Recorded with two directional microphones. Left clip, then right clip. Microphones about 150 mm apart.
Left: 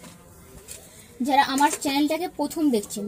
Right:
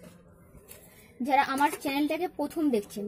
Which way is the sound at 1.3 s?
Centre (ahead or behind).